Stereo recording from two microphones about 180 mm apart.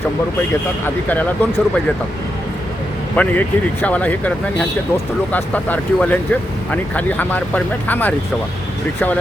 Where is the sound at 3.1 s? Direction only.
10° left (ahead or behind).